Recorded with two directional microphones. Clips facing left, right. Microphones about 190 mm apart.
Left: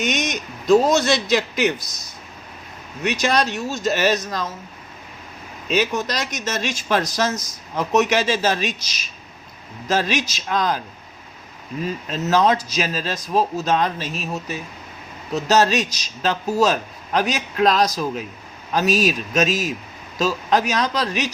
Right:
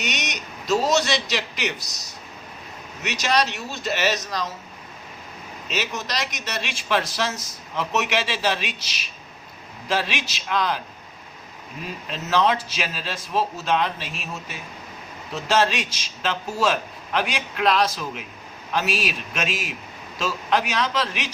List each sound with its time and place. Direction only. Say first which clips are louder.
0.0 s a man's voice: left 7 dB; 50° left (ahead or behind)
3.0 s speech: left 3 dB; 50° left (ahead or behind)
5.9 s speech: left 5 dB; 50° left (ahead or behind)
12.1 s a man's voice: left 3 dB; 40° left (ahead or behind)